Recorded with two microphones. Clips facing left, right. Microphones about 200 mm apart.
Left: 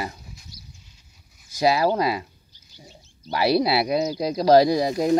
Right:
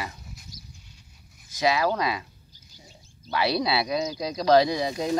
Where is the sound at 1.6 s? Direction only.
35° left (ahead or behind).